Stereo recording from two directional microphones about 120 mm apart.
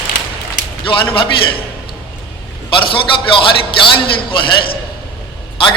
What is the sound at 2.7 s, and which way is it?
A man's voice, 45° left (ahead or behind).